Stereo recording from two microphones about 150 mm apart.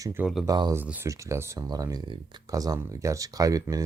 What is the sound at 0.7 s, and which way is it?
Speech, 15° right (ahead or behind).